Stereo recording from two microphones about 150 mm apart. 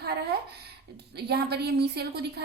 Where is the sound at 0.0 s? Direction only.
90° right.